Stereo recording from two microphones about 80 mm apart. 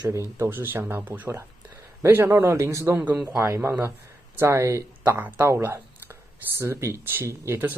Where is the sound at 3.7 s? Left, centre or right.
Right.